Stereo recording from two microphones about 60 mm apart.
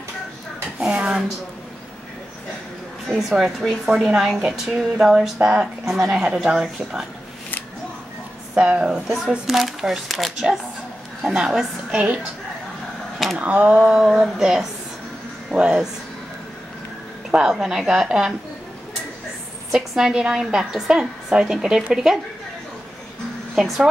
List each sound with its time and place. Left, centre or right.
0.7 s dishes: centre
3.1 s a woman's voice: centre
8.5 s a woman's voice: centre
9.5 s a woman's voice: centre
13.4 s speech: right
13.8 s a woman's voice: centre
17.3 s a woman's voice: centre
19.7 s a woman's voice: centre
23.5 s a woman's voice: centre